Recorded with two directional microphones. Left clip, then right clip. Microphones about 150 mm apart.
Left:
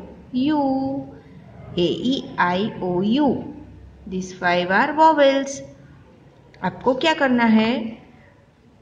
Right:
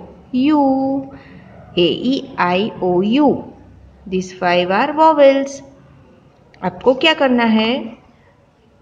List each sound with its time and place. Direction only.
0.3 s a woman's voice: 40° right (ahead or behind)
1.8 s a woman's voice: 35° right (ahead or behind)